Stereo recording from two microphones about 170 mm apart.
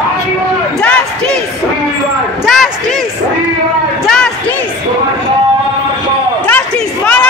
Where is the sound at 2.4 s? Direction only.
Centre (ahead or behind).